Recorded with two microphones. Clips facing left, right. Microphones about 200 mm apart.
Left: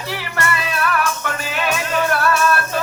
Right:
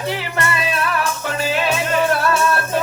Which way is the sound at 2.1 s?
25° right (ahead or behind).